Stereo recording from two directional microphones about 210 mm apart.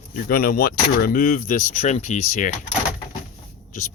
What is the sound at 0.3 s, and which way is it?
Speech, 45° left (ahead or behind).